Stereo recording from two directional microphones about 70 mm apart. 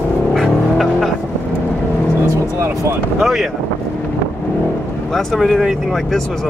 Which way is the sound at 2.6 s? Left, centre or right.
Right.